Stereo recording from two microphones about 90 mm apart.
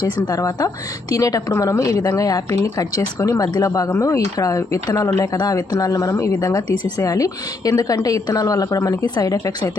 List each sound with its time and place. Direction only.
0.0 s a woman's voice: 40° left (ahead or behind)